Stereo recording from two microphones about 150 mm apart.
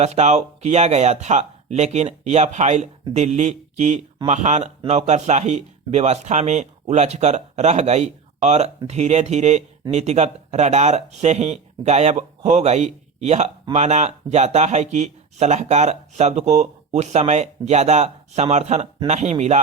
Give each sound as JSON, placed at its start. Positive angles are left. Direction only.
{"t": 0.0, "sound": "speech", "side_deg": -50}